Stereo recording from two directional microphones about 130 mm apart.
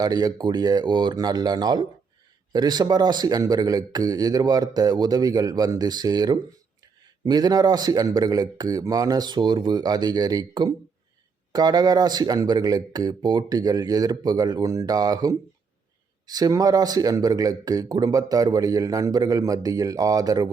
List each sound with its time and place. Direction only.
0.0 s a man's voice: 30° right (ahead or behind)